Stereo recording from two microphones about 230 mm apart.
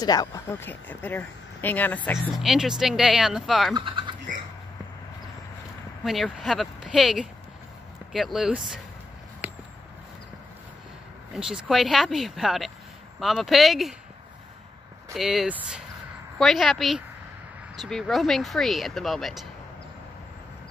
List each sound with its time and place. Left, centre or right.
0.0 s speech: centre
3.7 s a sound: right
6.0 s speech: centre
11.3 s speech: centre
15.1 s speech: centre